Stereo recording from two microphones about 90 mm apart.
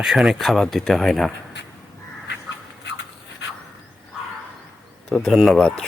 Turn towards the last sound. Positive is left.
turn(degrees=5)  # may be behind; listen again after turning